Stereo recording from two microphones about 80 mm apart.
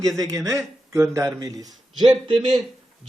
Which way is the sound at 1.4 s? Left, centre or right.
Right.